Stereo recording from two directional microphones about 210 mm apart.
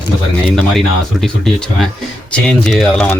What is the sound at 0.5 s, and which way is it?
Speech, centre (ahead or behind).